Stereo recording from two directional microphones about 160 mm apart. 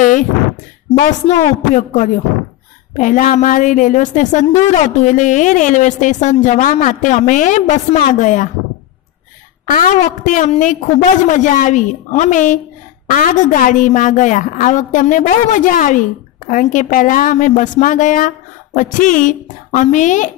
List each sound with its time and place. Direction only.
0.9 s a woman's voice: 50° left (ahead or behind)
9.7 s a woman's voice: 55° left (ahead or behind)